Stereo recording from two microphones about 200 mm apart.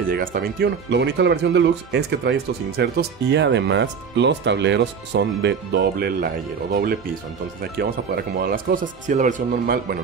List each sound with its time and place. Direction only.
0.0 s speech: 45° right (ahead or behind)